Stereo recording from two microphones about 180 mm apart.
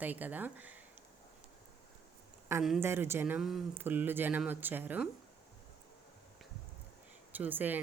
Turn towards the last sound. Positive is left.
turn(degrees=-10)  # may be behind; listen again after turning